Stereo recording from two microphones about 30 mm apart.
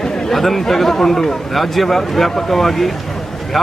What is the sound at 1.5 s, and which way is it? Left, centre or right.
A man's voice, centre.